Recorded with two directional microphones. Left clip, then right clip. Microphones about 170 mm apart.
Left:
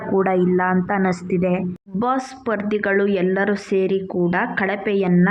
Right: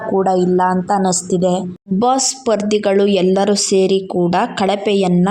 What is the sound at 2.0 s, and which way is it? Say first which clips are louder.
A woman's voice: right 7 dB; 35° right (ahead or behind).